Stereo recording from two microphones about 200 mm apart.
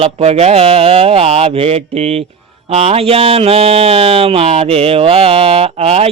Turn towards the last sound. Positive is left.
turn(degrees=-30)  # may be behind; listen again after turning